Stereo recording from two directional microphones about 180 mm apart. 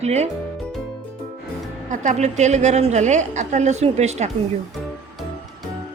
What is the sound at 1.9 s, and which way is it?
A woman's voice, 45° right (ahead or behind).